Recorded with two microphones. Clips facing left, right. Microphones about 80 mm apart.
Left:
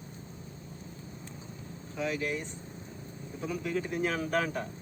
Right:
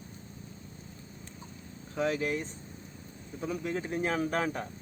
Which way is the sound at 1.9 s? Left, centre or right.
Right.